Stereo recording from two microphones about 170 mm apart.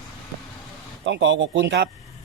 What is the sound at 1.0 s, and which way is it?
Speech, 90° right.